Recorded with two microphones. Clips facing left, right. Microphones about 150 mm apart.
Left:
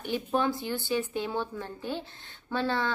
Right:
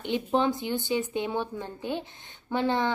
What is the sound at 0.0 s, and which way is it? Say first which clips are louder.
Speech: right 3 dB; 20° right (ahead or behind).